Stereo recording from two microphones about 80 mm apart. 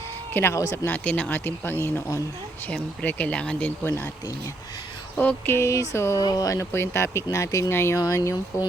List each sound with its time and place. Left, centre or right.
0.5 s speech: left
0.9 s speech: centre
2.6 s speech: centre
3.8 s speech: left
5.5 s speech: left
6.2 s speech: left